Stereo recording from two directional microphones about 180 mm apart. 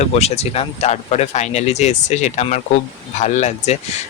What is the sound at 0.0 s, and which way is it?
Speech, 35° left (ahead or behind).